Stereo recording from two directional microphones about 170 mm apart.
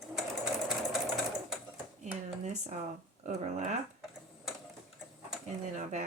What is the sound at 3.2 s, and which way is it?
Speech, 45° right (ahead or behind).